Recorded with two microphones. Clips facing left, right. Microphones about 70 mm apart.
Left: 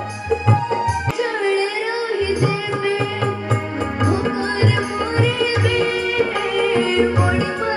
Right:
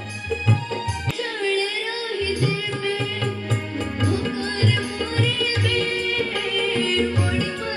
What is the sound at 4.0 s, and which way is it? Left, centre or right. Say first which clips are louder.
Tabla: left 5 dB; left.